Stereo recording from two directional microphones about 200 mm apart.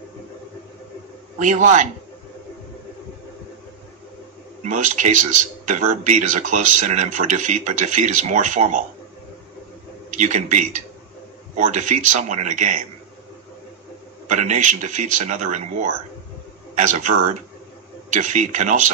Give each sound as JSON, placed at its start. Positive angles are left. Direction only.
{"t": 1.4, "sound": "speech", "side_deg": -40}
{"t": 4.6, "sound": "speech", "side_deg": -40}
{"t": 10.1, "sound": "speech", "side_deg": -35}
{"t": 14.2, "sound": "speech", "side_deg": -35}